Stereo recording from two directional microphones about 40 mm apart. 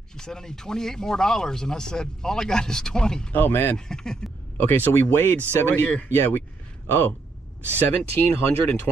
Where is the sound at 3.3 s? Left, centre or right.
Left.